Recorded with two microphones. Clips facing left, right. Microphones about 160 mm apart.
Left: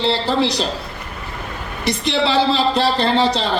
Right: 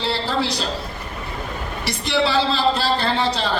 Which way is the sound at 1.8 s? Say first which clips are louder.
Left 2 dB; 20° left (ahead or behind).